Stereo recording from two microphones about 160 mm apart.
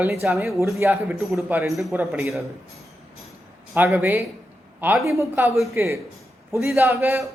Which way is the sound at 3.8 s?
10° right (ahead or behind).